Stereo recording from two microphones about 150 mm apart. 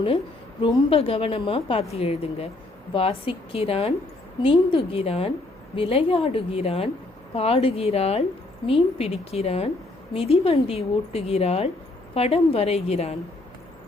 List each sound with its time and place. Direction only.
0.9 s a woman's voice: 40° left (ahead or behind)